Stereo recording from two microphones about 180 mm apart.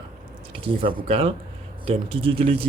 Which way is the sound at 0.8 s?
30° right (ahead or behind).